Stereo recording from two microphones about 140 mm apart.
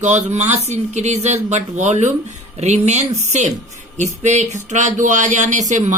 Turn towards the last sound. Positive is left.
turn(degrees=-60)  # may be behind; listen again after turning